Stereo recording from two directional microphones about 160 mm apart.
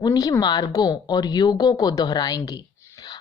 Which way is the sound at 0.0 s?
25° left (ahead or behind).